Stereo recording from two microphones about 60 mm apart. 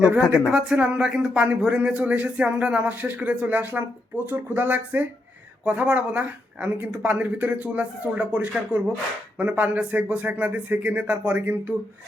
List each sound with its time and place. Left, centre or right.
0.5 s speech: centre; by 11.7 s right